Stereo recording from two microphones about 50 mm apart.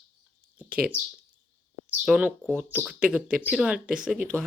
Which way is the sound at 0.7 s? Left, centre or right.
Right.